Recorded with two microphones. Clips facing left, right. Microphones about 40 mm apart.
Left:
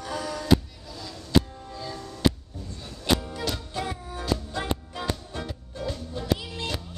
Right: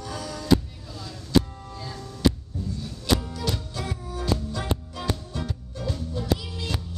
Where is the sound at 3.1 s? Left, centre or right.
Centre.